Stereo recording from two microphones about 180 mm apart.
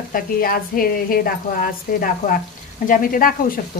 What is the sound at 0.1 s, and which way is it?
A woman's voice, 50° left (ahead or behind).